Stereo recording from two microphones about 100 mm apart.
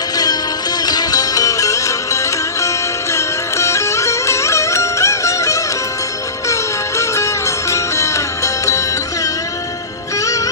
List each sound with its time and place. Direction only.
0.9 s music: 40° left (ahead or behind)
10.2 s music: 35° left (ahead or behind)